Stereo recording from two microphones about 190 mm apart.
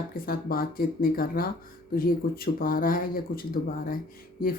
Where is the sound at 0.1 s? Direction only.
50° left (ahead or behind).